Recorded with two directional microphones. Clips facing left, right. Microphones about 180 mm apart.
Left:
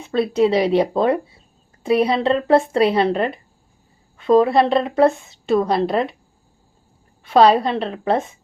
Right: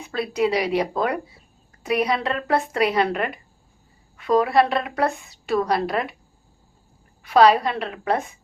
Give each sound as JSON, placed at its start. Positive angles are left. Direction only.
{"t": 0.0, "sound": "a woman's voice", "side_deg": 25}
{"t": 7.2, "sound": "a woman's voice", "side_deg": 25}